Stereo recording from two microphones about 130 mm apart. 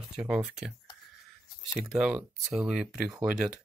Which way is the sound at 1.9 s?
5° right (ahead or behind).